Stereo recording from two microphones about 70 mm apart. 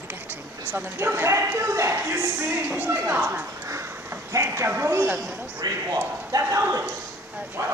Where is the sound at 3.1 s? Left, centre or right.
Right.